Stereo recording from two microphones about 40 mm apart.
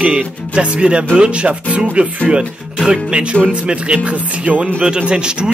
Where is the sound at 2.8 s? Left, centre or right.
Right.